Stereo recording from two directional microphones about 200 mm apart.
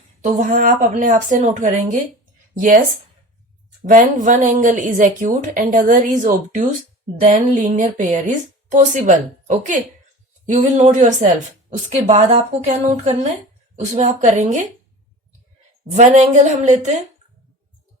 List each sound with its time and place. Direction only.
0.2 s speech: 40° right (ahead or behind)
3.8 s speech: 40° right (ahead or behind)
15.9 s speech: 35° right (ahead or behind)